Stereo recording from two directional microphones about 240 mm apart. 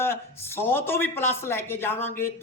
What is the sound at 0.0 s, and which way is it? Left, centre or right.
Speech, centre.